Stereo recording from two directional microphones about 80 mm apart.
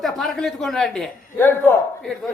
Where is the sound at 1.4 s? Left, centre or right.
Left.